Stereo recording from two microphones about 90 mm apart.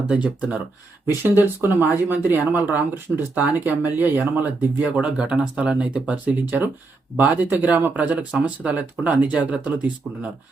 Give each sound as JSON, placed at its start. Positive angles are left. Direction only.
{"t": 0.1, "sound": "speech", "side_deg": -15}